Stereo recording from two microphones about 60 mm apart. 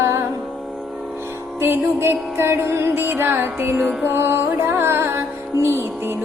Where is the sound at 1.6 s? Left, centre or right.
Right.